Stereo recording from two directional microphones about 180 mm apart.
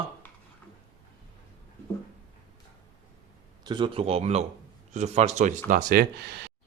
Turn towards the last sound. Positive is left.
turn(degrees=-65)  # may be behind; listen again after turning